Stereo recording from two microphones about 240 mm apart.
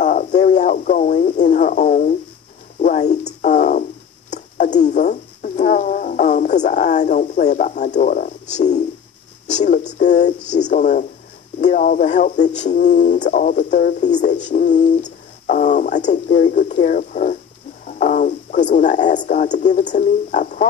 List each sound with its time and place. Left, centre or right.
0.0 s speech: left
2.8 s a sound: left
9.6 s speech: left